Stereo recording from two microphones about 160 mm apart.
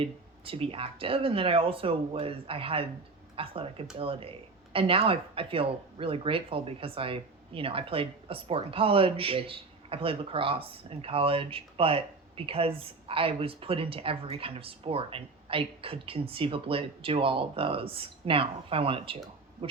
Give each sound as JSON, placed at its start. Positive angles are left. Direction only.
{"t": 0.0, "sound": "speech", "side_deg": -35}